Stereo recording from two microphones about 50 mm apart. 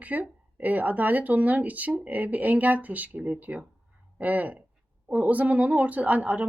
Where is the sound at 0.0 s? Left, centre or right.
Right.